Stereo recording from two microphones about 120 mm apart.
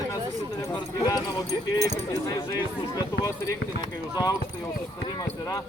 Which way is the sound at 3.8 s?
30° left (ahead or behind).